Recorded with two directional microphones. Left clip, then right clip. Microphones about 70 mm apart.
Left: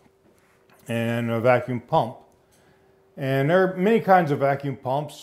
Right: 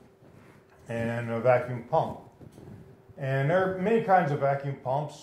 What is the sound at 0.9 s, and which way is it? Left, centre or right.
Speech, left.